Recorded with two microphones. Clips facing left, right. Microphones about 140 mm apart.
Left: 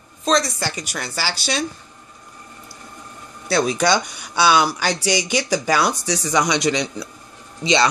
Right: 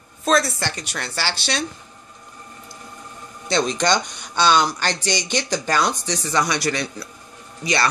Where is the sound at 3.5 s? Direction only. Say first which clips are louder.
Left 2 dB; 5° left (ahead or behind).